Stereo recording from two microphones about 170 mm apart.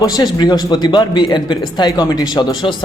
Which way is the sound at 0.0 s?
25° left (ahead or behind).